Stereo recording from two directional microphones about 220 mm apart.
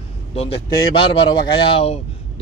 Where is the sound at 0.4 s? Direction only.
25° left (ahead or behind).